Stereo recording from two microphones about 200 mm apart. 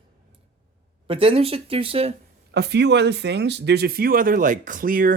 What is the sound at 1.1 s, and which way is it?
Speech, 30° right (ahead or behind).